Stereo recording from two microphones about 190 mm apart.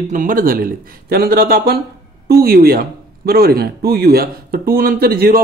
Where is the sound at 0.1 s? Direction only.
45° right (ahead or behind).